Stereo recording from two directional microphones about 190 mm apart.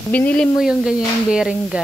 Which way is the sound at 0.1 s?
10° left (ahead or behind).